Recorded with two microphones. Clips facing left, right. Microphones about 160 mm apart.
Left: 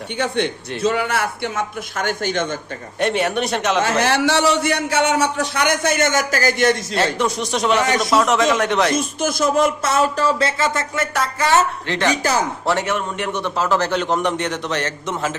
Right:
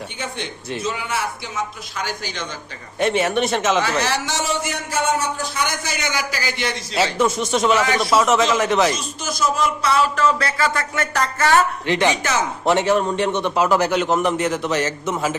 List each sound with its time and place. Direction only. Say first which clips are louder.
0.2 s a man's voice: left 11 dB; 65° left (ahead or behind)
3.0 s speech: right 1 dB; centre (ahead or behind)
4.0 s a man's voice: left 6 dB; 60° left (ahead or behind)
6.9 s speech: right 1 dB; 5° right (ahead or behind)
9.0 s speech: left 4 dB; 55° left (ahead or behind)
10.2 s a sound: left 1 dB; 25° left (ahead or behind)
11.0 s speech: right 1 dB; centre (ahead or behind)
11.9 s a man's voice: even; 15° right (ahead or behind)
12.9 s a man's voice: right 5 dB; 30° right (ahead or behind); by 15.4 s 10° right (ahead or behind)